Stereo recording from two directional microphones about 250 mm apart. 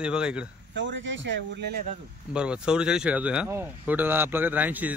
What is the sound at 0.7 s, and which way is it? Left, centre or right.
Speech, right.